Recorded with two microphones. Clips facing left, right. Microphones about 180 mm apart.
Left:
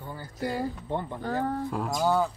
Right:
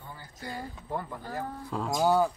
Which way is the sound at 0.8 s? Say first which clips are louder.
Left 3 dB; 25° left (ahead or behind).